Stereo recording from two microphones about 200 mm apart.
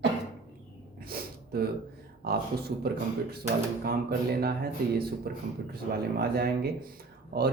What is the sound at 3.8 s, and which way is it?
Speech, 50° right (ahead or behind).